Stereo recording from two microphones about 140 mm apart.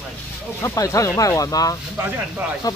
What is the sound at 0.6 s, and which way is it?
Speech, 20° left (ahead or behind).